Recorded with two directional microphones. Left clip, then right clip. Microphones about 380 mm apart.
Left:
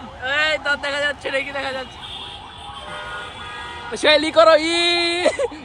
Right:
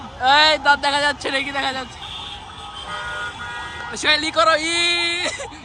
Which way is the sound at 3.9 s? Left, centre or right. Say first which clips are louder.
Left 3 dB; centre.